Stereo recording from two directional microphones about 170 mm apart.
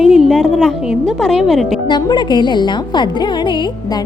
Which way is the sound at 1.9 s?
25° left (ahead or behind).